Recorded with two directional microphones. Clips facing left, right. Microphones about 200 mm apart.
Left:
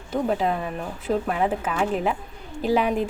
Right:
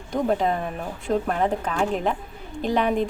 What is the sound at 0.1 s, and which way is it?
A woman's voice, 5° left (ahead or behind).